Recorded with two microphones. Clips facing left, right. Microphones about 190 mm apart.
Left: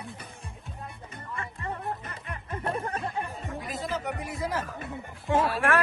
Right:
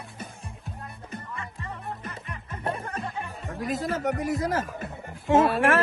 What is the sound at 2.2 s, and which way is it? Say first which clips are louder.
Music: left 2 dB; 55° left (ahead or behind).